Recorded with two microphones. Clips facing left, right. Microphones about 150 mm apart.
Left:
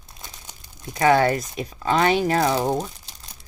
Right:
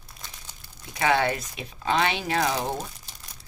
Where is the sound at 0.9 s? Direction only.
40° left (ahead or behind).